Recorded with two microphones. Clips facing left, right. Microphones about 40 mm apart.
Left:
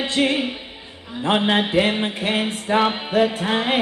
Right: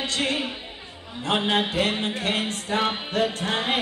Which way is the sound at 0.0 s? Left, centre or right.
Left.